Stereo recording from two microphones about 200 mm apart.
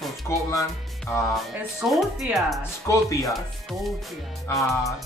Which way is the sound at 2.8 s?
15° left (ahead or behind).